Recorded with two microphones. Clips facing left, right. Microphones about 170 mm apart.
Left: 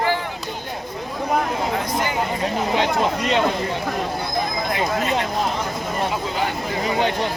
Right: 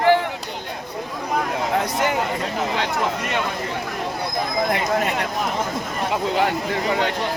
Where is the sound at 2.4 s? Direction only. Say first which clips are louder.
Left 3 dB; 20° left (ahead or behind).